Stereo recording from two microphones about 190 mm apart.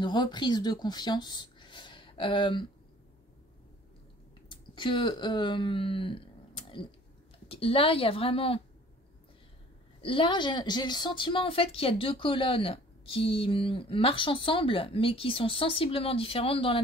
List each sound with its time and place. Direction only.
0.0 s speech: 25° left (ahead or behind)
4.5 s a woman's voice: 25° left (ahead or behind)
10.0 s a woman's voice: 25° left (ahead or behind)